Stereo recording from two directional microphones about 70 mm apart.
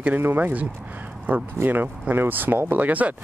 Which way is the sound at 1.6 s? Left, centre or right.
Right.